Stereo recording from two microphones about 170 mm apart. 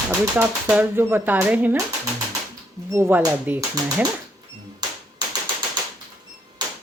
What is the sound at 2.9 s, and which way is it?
Speech, 15° right (ahead or behind).